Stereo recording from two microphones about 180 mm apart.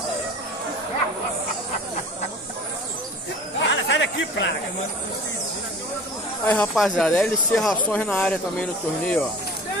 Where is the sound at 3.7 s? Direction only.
85° left.